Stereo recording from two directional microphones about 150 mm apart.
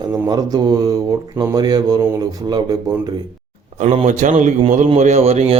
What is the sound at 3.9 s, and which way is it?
A man's voice, 50° right (ahead or behind).